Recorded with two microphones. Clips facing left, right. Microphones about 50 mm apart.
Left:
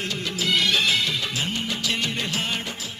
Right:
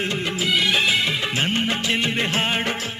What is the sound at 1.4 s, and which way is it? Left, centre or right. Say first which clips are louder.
Music: right 5 dB; right.